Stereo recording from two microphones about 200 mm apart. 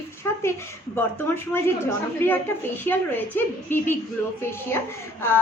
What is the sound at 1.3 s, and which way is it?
A woman's voice, 10° left (ahead or behind).